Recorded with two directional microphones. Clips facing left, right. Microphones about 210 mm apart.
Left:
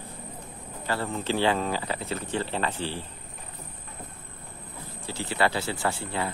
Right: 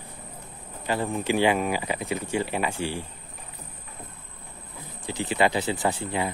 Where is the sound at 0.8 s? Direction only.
15° right (ahead or behind).